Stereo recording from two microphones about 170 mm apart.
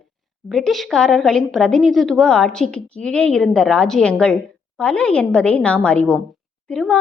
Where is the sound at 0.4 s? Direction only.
Centre (ahead or behind).